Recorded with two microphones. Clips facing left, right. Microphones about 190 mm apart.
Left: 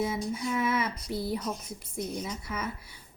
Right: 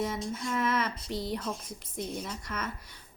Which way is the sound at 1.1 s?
10° left (ahead or behind).